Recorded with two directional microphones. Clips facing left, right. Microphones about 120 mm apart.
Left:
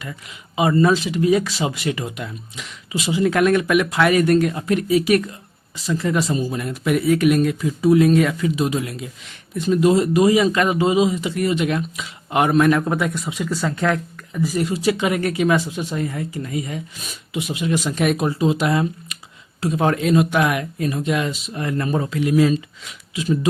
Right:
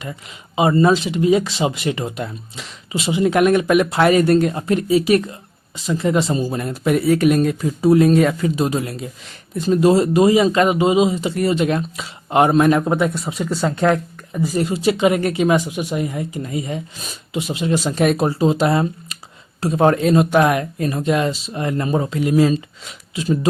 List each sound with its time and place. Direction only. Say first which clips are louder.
0.0 s speech: right 3 dB; 25° right (ahead or behind)
13.1 s speech: right 2 dB; 35° right (ahead or behind)
22.2 s speech: even; 35° right (ahead or behind)